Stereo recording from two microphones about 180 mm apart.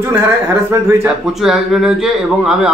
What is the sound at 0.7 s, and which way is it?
Speech, 15° right (ahead or behind).